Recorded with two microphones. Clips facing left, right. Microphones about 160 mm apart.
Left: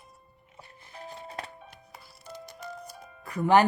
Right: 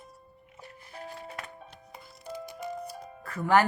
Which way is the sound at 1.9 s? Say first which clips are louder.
Right 2 dB; 5° left (ahead or behind).